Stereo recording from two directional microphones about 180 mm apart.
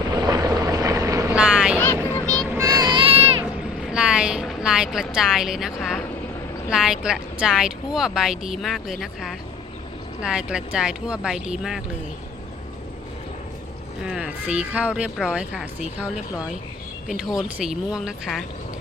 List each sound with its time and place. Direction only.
0.2 s vehicle: 20° right (ahead or behind)
1.4 s vehicle: 5° right (ahead or behind)
2.1 s vehicle: 5° left (ahead or behind)
2.6 s child singing: 20° right (ahead or behind)
3.9 s a sound: 5° right (ahead or behind)
6.7 s speech: 5° right (ahead or behind)
14.1 s speech: 5° right (ahead or behind)
17.1 s speech: 5° right (ahead or behind)